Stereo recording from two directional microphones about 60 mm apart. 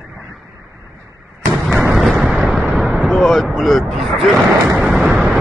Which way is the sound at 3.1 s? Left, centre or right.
Centre.